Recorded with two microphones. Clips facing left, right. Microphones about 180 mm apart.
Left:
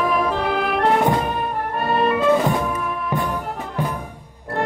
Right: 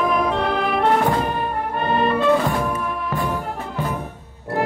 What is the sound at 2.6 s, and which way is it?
Music, centre (ahead or behind).